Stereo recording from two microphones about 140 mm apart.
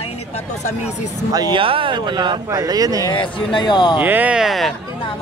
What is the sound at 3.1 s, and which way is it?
Speech, 35° left (ahead or behind).